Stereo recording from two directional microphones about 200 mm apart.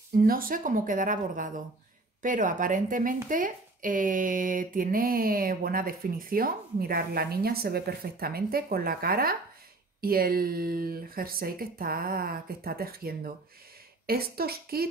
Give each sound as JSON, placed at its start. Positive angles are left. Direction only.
{"t": 0.2, "sound": "a woman's voice", "side_deg": -45}